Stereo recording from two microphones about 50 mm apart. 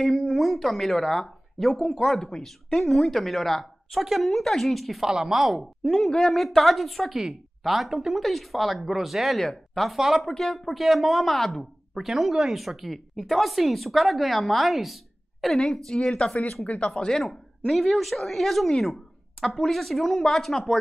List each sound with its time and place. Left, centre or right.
0.0 s speech: centre
5.0 s speech: centre
5.9 s speech: centre
16.6 s speech: left
16.9 s speech: centre